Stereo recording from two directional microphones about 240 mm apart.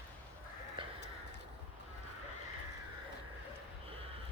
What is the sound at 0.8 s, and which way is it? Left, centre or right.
Crow, right.